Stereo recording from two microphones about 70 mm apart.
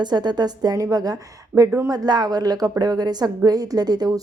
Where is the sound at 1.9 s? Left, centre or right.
Right.